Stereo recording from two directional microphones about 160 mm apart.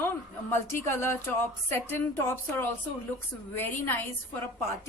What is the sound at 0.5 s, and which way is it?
A woman's voice, 15° left (ahead or behind).